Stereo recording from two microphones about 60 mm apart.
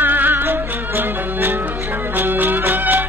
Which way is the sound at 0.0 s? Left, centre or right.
Right.